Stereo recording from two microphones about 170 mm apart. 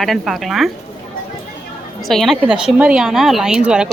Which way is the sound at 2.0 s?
Centre (ahead or behind).